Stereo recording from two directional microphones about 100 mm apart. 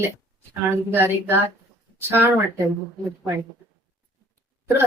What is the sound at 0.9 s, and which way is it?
A woman's voice, 20° right (ahead or behind).